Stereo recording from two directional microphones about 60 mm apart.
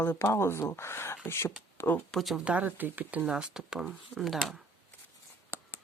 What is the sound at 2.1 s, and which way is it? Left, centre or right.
Speech, centre.